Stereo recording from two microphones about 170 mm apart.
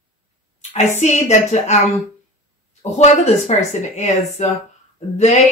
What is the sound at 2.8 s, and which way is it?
Speech, 40° left (ahead or behind).